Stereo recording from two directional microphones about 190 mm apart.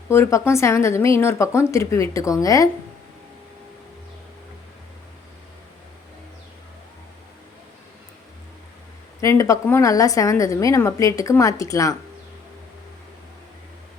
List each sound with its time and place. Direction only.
0.1 s a woman's voice: 15° left (ahead or behind)
9.2 s a woman's voice: 15° left (ahead or behind)